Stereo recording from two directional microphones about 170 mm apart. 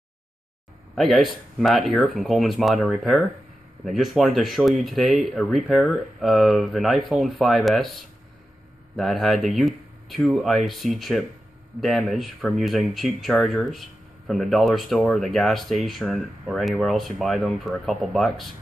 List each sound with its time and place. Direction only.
0.9 s speech: centre (ahead or behind)